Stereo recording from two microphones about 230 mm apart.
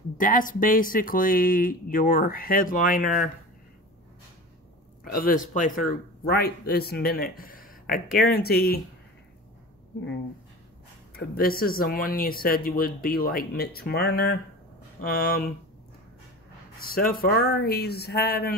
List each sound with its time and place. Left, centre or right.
0.2 s speech: left
5.0 s speech: left
11.1 s speech: left
16.9 s speech: left